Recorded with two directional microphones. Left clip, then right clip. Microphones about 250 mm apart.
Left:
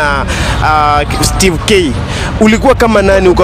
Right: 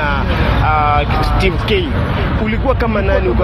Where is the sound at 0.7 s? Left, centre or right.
Left.